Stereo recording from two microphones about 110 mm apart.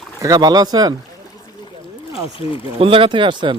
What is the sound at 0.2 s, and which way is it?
Speech, 35° right (ahead or behind).